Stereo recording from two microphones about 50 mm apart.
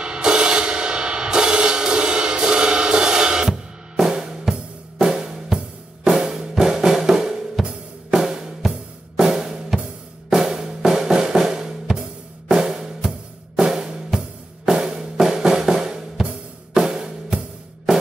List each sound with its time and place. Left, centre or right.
0.0 s music: centre
6.0 s drum: centre
7.6 s drum kit: centre
10.3 s drum: centre
12.5 s music: centre
13.6 s drum: centre
16.7 s music: centre